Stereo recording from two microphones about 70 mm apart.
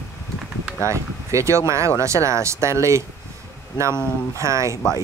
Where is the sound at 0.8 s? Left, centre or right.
Right.